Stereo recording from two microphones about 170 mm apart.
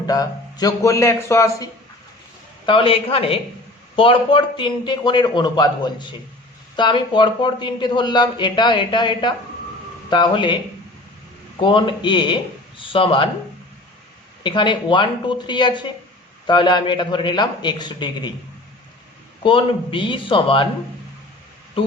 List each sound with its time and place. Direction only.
0.1 s speech: 20° left (ahead or behind)
2.6 s a man's voice: 35° left (ahead or behind)
11.6 s speech: 30° left (ahead or behind)
14.4 s speech: 25° left (ahead or behind)
19.4 s speech: 30° left (ahead or behind)